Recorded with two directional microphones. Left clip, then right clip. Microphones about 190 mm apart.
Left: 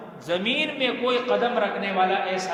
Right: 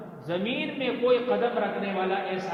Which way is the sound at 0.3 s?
50° left (ahead or behind).